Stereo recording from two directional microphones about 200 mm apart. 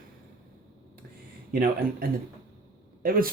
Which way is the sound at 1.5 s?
45° right (ahead or behind).